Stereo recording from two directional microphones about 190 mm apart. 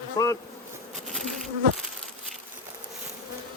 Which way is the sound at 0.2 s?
20° left (ahead or behind).